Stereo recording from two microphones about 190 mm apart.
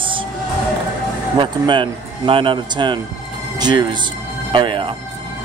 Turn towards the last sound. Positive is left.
turn(degrees=-25)  # may be behind; listen again after turning